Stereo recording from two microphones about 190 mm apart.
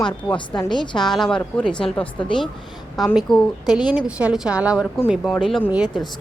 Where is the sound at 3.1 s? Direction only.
5° right (ahead or behind).